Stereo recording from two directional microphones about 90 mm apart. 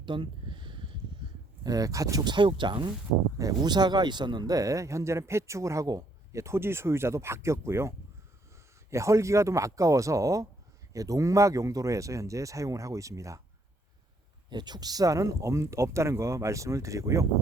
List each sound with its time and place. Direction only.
0.0 s a sound: 65° right (ahead or behind)
1.6 s a man's voice: 40° right (ahead or behind)
2.2 s speech: 65° right (ahead or behind)
3.3 s a man's voice: 45° right (ahead or behind)
14.5 s a man's voice: 50° right (ahead or behind); by 17.2 s 35° right (ahead or behind)